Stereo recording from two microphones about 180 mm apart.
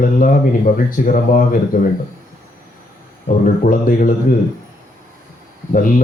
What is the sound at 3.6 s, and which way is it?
Speech, 50° left (ahead or behind).